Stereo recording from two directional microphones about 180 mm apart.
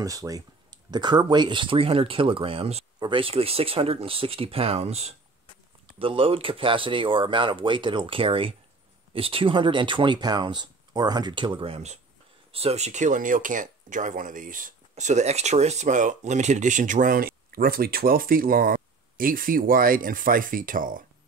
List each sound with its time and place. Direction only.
0.0 s speech: 20° right (ahead or behind); by 21.0 s 50° right (ahead or behind)